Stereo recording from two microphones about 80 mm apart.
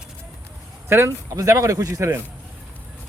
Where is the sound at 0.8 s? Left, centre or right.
Right.